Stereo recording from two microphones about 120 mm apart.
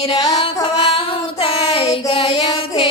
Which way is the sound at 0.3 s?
50° left (ahead or behind).